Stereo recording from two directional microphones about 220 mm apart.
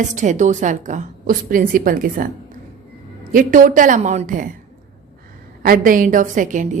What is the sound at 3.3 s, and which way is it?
A woman's voice, 35° right (ahead or behind).